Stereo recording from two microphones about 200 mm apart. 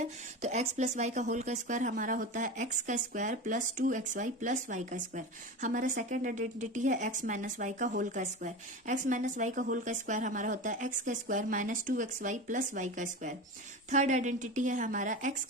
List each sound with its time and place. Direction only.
0.0 s speech: 35° right (ahead or behind)